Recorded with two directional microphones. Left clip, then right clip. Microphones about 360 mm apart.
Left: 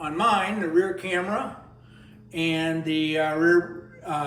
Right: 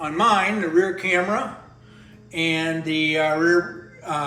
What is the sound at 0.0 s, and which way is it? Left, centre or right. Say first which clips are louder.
Speech: right 4 dB; centre.